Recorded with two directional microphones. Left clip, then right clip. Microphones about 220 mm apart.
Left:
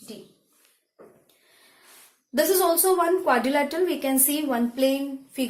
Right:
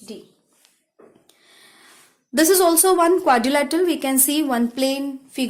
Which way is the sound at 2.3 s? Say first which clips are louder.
Right 5 dB; 45° right (ahead or behind).